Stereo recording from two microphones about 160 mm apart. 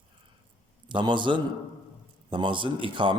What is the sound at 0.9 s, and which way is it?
A man's voice, 30° right (ahead or behind).